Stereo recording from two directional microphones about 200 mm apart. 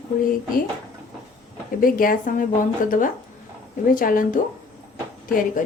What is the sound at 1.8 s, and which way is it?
Speech, 45° left (ahead or behind).